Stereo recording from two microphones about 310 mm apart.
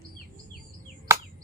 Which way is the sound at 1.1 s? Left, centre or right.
Centre.